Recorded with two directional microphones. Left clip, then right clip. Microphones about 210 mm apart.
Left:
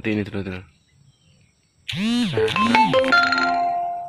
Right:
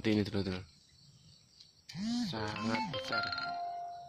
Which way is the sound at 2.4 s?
5° left (ahead or behind).